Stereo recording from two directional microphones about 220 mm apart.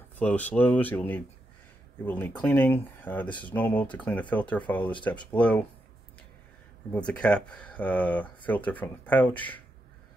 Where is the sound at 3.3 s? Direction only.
20° left (ahead or behind).